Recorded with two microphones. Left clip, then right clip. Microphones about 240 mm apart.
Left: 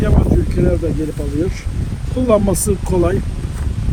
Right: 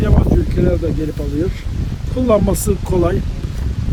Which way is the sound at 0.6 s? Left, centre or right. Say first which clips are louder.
Even; centre.